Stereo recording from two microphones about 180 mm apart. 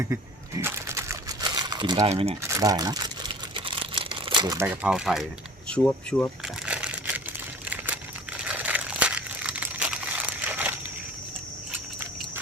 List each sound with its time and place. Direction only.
0.1 s a sound: 15° right (ahead or behind)
2.0 s speech: 35° right (ahead or behind)
2.4 s crumpling: 20° right (ahead or behind)
4.5 s speech: 10° right (ahead or behind); by 6.3 s 10° left (ahead or behind)
6.4 s crumpling: 5° right (ahead or behind)
10.4 s crushing: 10° right (ahead or behind)